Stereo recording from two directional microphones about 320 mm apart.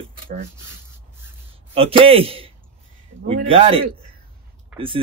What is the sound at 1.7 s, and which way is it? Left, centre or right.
Speech, centre.